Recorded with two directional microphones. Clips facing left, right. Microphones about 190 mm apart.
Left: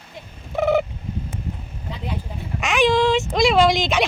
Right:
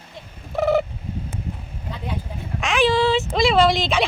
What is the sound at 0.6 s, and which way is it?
Fowl, centre (ahead or behind).